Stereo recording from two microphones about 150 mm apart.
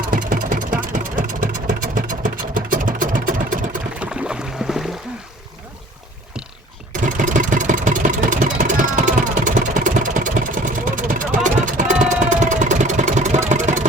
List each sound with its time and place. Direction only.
0.1 s vehicle: 60° right (ahead or behind)
4.0 s boat: 5° right (ahead or behind)
7.0 s engine: 60° right (ahead or behind)